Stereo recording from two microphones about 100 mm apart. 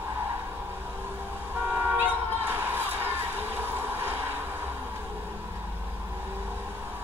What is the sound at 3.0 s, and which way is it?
Vehicle, 20° right (ahead or behind).